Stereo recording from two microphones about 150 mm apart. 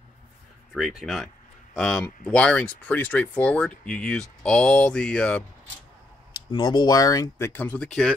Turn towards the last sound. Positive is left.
turn(degrees=15)  # may be behind; listen again after turning